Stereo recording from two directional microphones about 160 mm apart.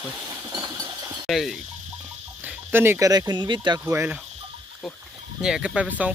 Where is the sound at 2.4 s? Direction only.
10° right (ahead or behind); by 3.8 s 30° right (ahead or behind).